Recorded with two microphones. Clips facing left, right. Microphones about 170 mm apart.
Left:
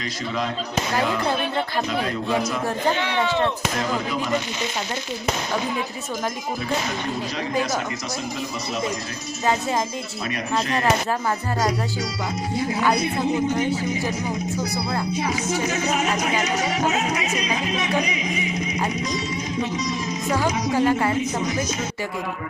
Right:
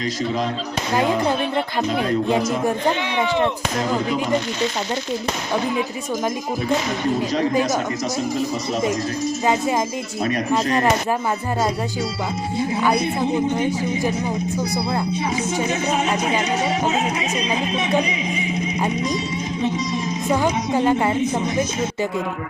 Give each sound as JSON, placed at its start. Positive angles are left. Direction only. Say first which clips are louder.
{"t": 3.2, "sound": "speech", "louder": "right 3 dB", "side_deg": -15}
{"t": 10.2, "sound": "speech", "louder": "right 5 dB", "side_deg": -40}
{"t": 20.3, "sound": "a woman's voice", "louder": "right 2 dB", "side_deg": -20}